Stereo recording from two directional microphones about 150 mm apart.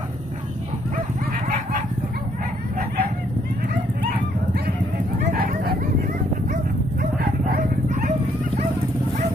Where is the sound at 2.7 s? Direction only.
85° right.